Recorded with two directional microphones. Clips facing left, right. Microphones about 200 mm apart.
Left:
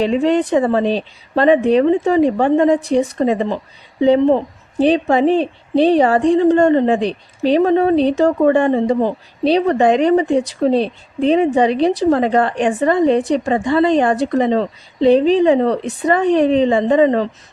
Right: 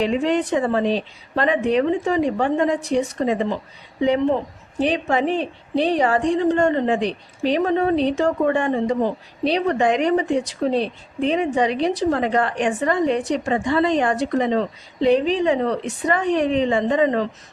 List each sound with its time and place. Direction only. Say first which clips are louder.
0.0 s a woman's voice: left 5 dB; 30° left (ahead or behind)